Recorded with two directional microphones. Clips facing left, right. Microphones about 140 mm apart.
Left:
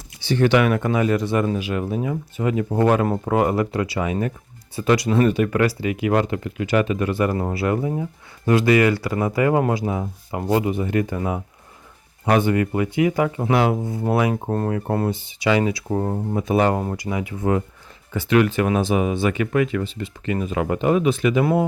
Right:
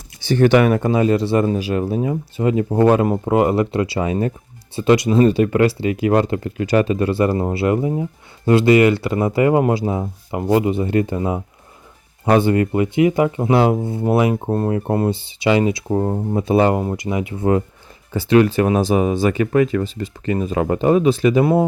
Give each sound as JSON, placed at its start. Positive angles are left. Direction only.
{"t": 0.2, "sound": "speech", "side_deg": -45}
{"t": 14.4, "sound": "speech", "side_deg": -10}
{"t": 14.7, "sound": "speech", "side_deg": -25}
{"t": 16.7, "sound": "speech", "side_deg": -15}